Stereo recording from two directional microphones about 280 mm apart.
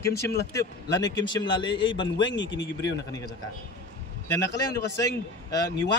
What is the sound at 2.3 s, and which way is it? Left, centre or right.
Speech, left.